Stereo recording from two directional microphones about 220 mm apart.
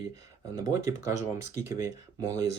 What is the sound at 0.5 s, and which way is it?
Speech, 15° right (ahead or behind).